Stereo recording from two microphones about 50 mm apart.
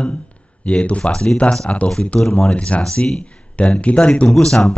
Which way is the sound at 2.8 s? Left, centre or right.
Centre.